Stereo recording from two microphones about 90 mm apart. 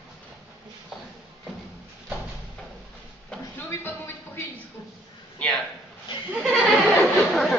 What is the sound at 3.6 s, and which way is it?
Speech, 25° left (ahead or behind).